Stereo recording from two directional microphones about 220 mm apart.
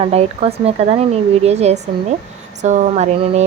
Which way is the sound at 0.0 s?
30° right (ahead or behind).